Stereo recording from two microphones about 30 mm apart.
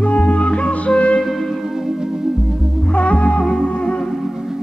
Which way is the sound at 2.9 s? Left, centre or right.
Left.